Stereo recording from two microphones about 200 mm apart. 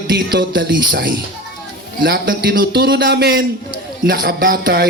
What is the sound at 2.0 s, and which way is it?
A man's voice, 50° right (ahead or behind).